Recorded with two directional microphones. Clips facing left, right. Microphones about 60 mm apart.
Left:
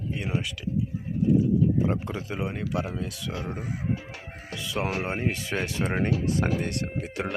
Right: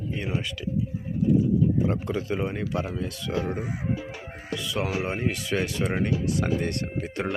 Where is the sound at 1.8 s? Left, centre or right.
Centre.